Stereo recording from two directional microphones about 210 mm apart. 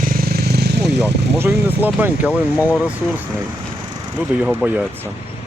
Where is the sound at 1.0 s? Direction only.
10° right (ahead or behind).